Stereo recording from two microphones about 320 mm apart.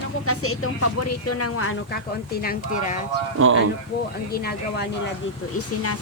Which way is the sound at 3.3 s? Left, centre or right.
Right.